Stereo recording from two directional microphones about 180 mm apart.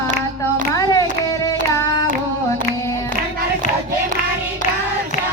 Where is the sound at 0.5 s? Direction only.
20° left (ahead or behind).